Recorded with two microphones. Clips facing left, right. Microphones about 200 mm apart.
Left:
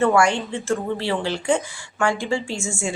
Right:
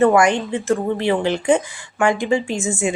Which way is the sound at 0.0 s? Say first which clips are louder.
Right 4 dB; 20° right (ahead or behind).